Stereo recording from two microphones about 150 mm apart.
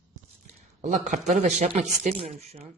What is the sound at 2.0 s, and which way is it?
Speech, 45° right (ahead or behind).